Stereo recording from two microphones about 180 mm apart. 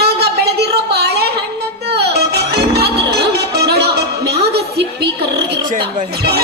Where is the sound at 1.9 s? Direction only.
65° right (ahead or behind).